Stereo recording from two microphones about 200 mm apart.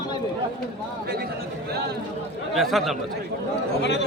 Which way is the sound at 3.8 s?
60° left (ahead or behind).